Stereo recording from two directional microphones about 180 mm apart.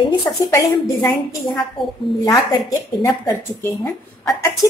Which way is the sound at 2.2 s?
20° left (ahead or behind).